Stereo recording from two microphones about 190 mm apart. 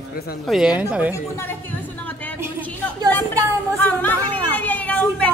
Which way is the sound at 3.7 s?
10° left (ahead or behind).